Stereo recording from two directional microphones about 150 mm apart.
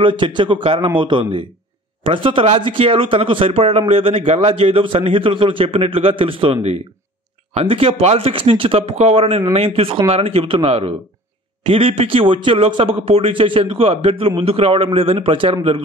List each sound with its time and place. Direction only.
0.0 s speech: 30° right (ahead or behind)